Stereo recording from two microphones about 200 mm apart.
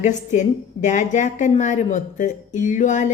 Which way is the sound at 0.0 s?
35° left (ahead or behind).